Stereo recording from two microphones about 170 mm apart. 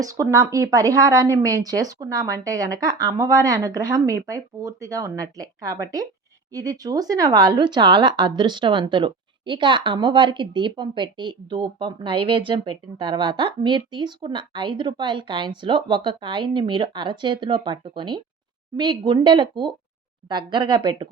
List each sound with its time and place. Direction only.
0.0 s speech: 20° right (ahead or behind)